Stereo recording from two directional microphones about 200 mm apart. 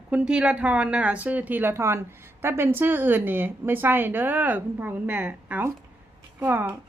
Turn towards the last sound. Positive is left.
turn(degrees=-10)  # may be behind; listen again after turning